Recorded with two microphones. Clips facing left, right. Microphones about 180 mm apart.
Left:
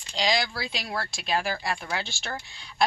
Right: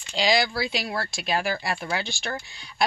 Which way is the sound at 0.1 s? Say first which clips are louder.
Right 4 dB; 5° right (ahead or behind).